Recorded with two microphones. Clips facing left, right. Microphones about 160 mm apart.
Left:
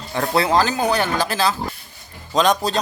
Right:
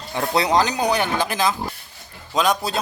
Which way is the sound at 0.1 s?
15° right (ahead or behind).